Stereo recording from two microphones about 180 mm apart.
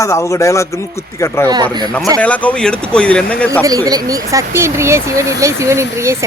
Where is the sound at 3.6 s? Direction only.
20° right (ahead or behind).